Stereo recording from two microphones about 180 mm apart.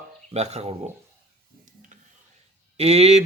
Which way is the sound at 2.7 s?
35° right (ahead or behind).